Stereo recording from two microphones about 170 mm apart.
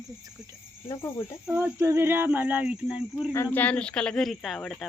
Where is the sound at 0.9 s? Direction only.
15° left (ahead or behind).